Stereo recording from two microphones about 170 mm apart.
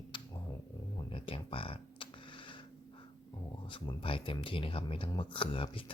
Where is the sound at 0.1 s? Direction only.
30° left (ahead or behind).